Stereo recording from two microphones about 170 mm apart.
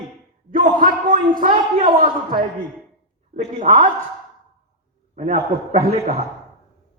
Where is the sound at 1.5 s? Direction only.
30° right (ahead or behind).